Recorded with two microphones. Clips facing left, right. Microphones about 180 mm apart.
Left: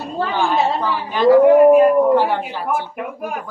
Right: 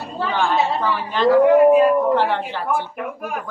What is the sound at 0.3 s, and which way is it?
A woman's voice, 10° left (ahead or behind).